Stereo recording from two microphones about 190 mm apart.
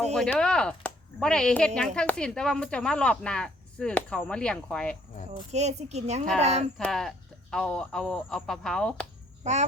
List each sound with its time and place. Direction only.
0.0 s speech: 5° left (ahead or behind)
5.3 s speech: 35° right (ahead or behind)
6.7 s speech: centre (ahead or behind)
9.4 s chicken: 35° right (ahead or behind)